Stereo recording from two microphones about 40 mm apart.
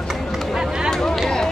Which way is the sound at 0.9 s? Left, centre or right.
Centre.